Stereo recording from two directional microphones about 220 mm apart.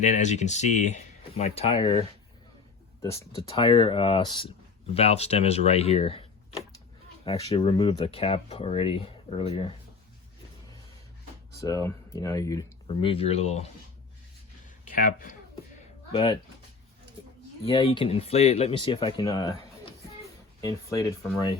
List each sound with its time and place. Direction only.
0.0 s speech: 35° left (ahead or behind)
7.3 s speech: 25° left (ahead or behind)
11.6 s speech: 15° left (ahead or behind)
14.8 s speech: 40° left (ahead or behind)
16.1 s speech: 25° left (ahead or behind)
17.7 s speech: 25° left (ahead or behind)